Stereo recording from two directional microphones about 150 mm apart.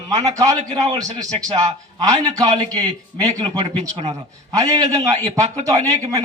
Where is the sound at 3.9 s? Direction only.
45° right (ahead or behind).